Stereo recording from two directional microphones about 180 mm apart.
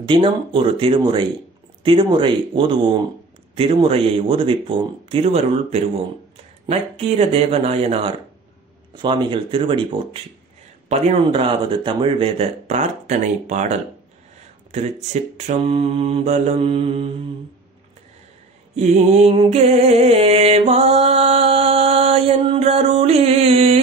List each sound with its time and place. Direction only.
0.0 s mantra: 30° right (ahead or behind)
1.8 s speech: 30° right (ahead or behind)
3.5 s mantra: 30° right (ahead or behind)
8.9 s speech: 25° right (ahead or behind)
10.9 s mantra: 35° right (ahead or behind)
18.8 s mantra: 35° right (ahead or behind)